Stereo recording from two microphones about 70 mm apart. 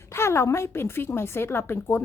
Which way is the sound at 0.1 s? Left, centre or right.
Left.